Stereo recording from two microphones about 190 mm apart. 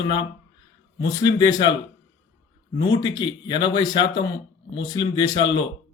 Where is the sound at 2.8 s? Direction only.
20° left (ahead or behind).